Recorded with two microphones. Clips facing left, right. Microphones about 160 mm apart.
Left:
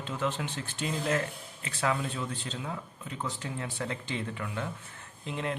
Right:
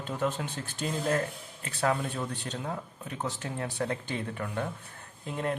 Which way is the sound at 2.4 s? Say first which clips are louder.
Right 2 dB; 65° right (ahead or behind).